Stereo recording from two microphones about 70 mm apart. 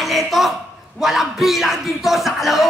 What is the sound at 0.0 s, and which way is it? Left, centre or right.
A man's voice, centre.